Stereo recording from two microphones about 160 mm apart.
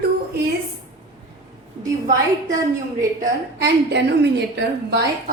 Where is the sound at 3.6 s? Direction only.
90° right.